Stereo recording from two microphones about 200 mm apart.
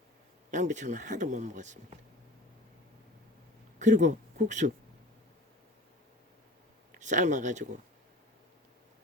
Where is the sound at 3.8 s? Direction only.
40° right (ahead or behind).